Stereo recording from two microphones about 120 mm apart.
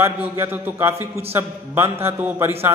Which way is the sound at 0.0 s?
20° right (ahead or behind).